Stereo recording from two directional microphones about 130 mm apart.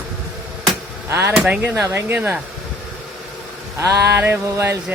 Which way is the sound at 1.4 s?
10° right (ahead or behind).